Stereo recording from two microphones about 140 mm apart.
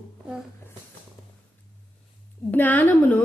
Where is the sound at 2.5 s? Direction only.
15° left (ahead or behind).